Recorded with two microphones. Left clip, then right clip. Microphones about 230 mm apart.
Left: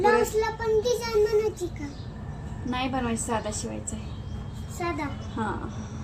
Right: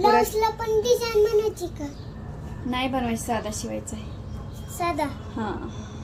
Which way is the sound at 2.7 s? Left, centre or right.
Centre.